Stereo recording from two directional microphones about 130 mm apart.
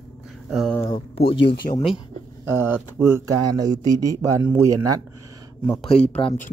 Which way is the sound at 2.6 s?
20° right (ahead or behind).